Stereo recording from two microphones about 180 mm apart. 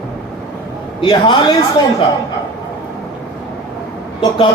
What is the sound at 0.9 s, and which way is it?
Speech, 25° left (ahead or behind).